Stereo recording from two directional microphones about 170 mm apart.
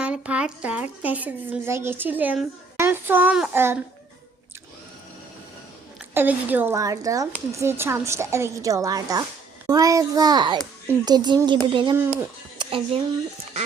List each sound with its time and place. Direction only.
0.0 s a woman's voice: 5° right (ahead or behind)
6.1 s a woman's voice: 10° right (ahead or behind); by 11.9 s 30° right (ahead or behind)
12.5 s a sound: 30° right (ahead or behind)